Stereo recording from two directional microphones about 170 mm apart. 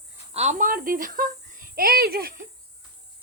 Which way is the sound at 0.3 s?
45° right (ahead or behind).